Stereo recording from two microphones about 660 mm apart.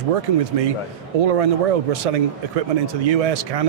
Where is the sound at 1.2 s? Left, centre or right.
Right.